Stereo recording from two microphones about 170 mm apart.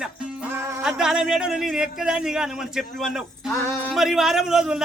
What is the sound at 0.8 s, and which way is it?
A man's voice, 5° right (ahead or behind).